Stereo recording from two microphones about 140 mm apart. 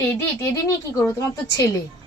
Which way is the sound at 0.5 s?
20° left (ahead or behind).